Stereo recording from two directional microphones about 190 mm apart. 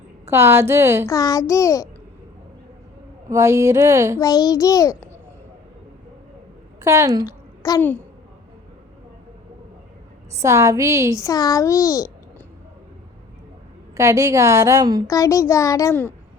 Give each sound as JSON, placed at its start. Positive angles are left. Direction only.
{"t": 0.3, "sound": "a woman's voice", "side_deg": -15}
{"t": 1.0, "sound": "a child's voice", "side_deg": 20}
{"t": 3.2, "sound": "a woman's voice", "side_deg": -15}
{"t": 4.2, "sound": "a child's voice", "side_deg": 20}
{"t": 6.8, "sound": "a woman's voice", "side_deg": -15}
{"t": 7.3, "sound": "a child's voice", "side_deg": 20}
{"t": 10.3, "sound": "a woman's voice", "side_deg": -15}
{"t": 11.2, "sound": "a child's voice", "side_deg": 20}
{"t": 13.9, "sound": "a woman's voice", "side_deg": -15}
{"t": 15.0, "sound": "a child's voice", "side_deg": 15}